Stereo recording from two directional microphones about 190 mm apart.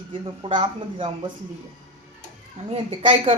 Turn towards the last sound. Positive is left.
turn(degrees=-30)  # may be behind; listen again after turning